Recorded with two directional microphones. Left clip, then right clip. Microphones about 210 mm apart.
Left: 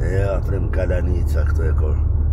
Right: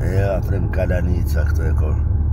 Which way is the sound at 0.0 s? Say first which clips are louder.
Right 1 dB; 5° right (ahead or behind).